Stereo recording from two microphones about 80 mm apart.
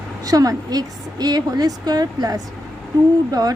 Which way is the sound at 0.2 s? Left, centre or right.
Right.